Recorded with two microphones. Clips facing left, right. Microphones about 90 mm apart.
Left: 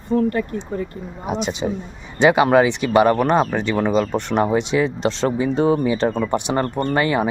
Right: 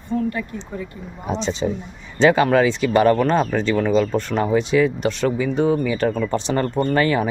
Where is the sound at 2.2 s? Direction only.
15° left (ahead or behind).